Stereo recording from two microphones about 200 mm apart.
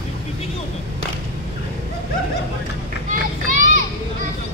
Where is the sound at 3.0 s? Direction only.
40° right (ahead or behind).